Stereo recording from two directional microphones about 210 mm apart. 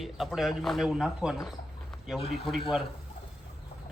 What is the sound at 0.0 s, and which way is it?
Speech, centre (ahead or behind).